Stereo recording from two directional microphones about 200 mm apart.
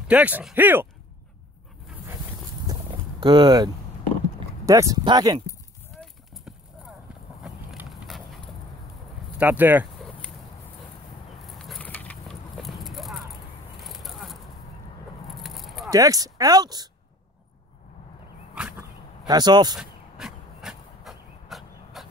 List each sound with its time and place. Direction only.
0.1 s speech: 5° right (ahead or behind)
2.7 s a sound: 20° right (ahead or behind)
4.6 s speech: 15° right (ahead or behind)
5.9 s clip-clop: centre (ahead or behind)
9.4 s speech: 10° right (ahead or behind)
11.4 s vehicle: centre (ahead or behind)
15.2 s keys jangling: centre (ahead or behind)
15.9 s speech: 15° right (ahead or behind)
18.5 s a sound: 5° right (ahead or behind)
19.2 s speech: 20° right (ahead or behind)
19.8 s a sound: centre (ahead or behind)